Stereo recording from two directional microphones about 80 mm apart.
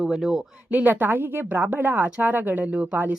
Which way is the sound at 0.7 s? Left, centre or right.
Right.